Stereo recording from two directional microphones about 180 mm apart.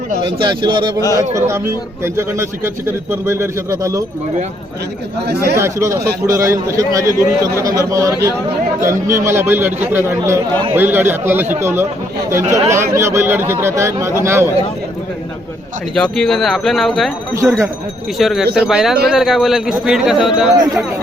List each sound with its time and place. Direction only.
0.2 s a man's voice: 25° right (ahead or behind)
1.3 s a man's voice: 15° right (ahead or behind)
5.5 s a man's voice: 15° right (ahead or behind)
16.0 s a man's voice: 5° left (ahead or behind)